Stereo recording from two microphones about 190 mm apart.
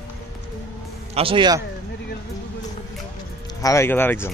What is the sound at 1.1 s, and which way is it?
Speech, 25° right (ahead or behind).